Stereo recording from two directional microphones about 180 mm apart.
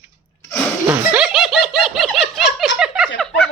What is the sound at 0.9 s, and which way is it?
Laughter, 5° right (ahead or behind).